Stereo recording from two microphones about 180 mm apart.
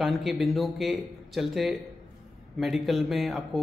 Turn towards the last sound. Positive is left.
turn(degrees=0)  # may be behind; listen again after turning